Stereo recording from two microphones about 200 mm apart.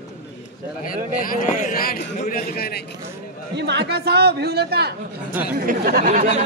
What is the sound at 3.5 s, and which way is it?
A man's voice, 60° right (ahead or behind).